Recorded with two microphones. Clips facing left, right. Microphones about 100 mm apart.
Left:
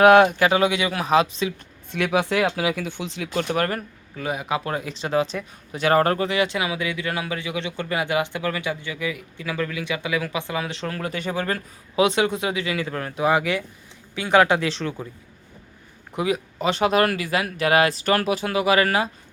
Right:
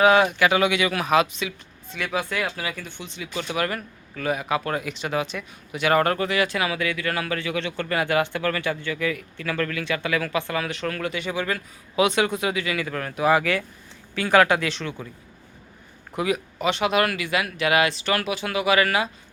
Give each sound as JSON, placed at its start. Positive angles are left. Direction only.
{"t": 0.0, "sound": "speech", "side_deg": 55}
{"t": 0.3, "sound": "speech", "side_deg": 35}
{"t": 1.9, "sound": "speech", "side_deg": 65}
{"t": 3.3, "sound": "speech", "side_deg": 40}
{"t": 4.1, "sound": "speech", "side_deg": 20}
{"t": 11.1, "sound": "speech", "side_deg": 40}
{"t": 11.9, "sound": "speech", "side_deg": 25}
{"t": 16.1, "sound": "a man's voice", "side_deg": 25}
{"t": 16.6, "sound": "speech", "side_deg": 35}